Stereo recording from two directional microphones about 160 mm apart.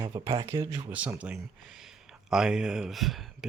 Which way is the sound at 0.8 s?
10° right (ahead or behind).